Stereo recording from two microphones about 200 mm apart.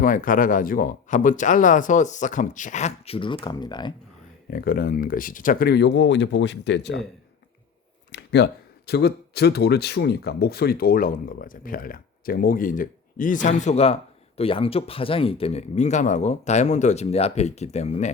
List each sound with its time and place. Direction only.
0.0 s speech: 45° left (ahead or behind); by 3.9 s 20° left (ahead or behind)
4.5 s speech: 45° left (ahead or behind); by 7.0 s 60° left (ahead or behind)
8.1 s a sound: 60° left (ahead or behind)
8.9 s speech: 55° left (ahead or behind); by 18.1 s 35° left (ahead or behind)